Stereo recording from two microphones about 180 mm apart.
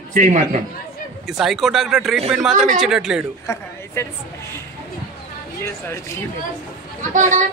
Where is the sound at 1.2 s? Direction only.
Centre (ahead or behind).